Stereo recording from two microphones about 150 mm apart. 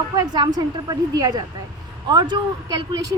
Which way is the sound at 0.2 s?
30° right (ahead or behind).